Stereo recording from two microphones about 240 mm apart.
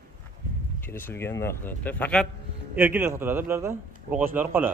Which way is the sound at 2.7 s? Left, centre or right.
Centre.